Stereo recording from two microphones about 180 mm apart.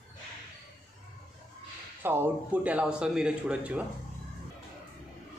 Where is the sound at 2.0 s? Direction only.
10° right (ahead or behind).